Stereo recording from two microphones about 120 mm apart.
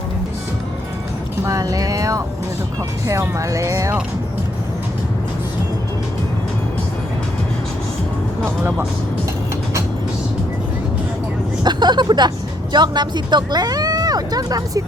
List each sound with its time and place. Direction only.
1.5 s speech: 30° right (ahead or behind)
11.6 s speech: 40° right (ahead or behind)